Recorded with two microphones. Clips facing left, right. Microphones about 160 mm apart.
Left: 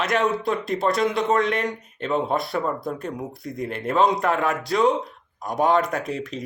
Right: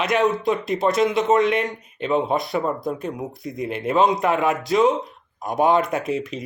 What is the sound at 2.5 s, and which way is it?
Speech, 20° right (ahead or behind).